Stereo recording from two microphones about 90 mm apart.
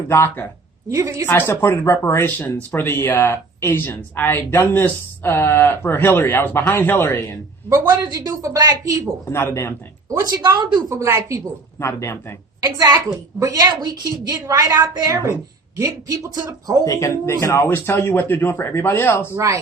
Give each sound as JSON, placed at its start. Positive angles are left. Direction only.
{"t": 0.1, "sound": "speech", "side_deg": 30}
{"t": 0.9, "sound": "a woman's voice", "side_deg": -35}
{"t": 1.3, "sound": "speech", "side_deg": 25}
{"t": 8.0, "sound": "a woman's voice", "side_deg": -45}
{"t": 9.3, "sound": "speech", "side_deg": 30}
{"t": 10.1, "sound": "a woman's voice", "side_deg": -40}
{"t": 10.8, "sound": "a woman's voice", "side_deg": -30}
{"t": 11.8, "sound": "speech", "side_deg": 30}
{"t": 13.4, "sound": "a woman's voice", "side_deg": -40}
{"t": 16.8, "sound": "speech", "side_deg": 35}
{"t": 19.3, "sound": "a woman's voice", "side_deg": -35}